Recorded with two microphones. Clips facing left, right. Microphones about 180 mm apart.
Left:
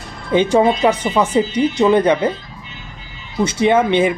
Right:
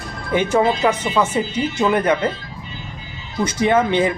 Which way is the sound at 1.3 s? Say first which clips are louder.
Left 5 dB; 25° left (ahead or behind).